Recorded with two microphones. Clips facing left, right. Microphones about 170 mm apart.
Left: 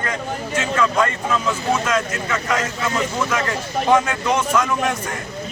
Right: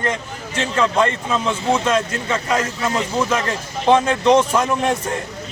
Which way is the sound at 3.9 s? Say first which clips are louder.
Right 5 dB; 30° right (ahead or behind).